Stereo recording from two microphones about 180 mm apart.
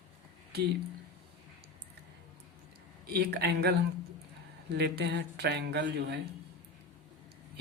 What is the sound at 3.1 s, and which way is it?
Speech, 65° right (ahead or behind).